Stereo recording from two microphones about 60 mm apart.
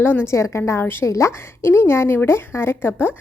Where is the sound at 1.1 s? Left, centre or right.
Left.